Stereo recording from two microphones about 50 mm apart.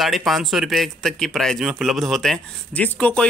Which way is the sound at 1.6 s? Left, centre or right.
Centre.